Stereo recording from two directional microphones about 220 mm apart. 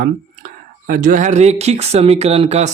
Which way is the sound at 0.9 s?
40° right (ahead or behind).